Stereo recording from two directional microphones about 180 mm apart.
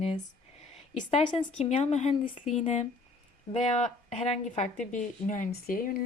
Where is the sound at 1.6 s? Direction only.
35° left (ahead or behind).